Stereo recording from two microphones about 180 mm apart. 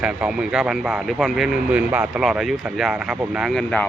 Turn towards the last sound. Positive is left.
turn(degrees=5)  # may be behind; listen again after turning